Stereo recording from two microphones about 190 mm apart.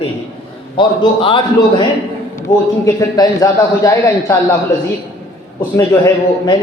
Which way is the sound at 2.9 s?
20° left (ahead or behind).